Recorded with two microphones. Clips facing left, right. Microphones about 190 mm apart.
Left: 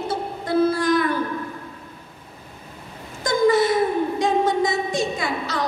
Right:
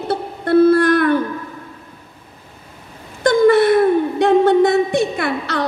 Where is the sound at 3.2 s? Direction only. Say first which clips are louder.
Right 6 dB; 65° right (ahead or behind).